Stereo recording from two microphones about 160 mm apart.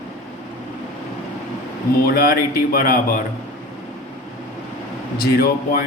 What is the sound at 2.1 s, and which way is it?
Speech, 70° left (ahead or behind).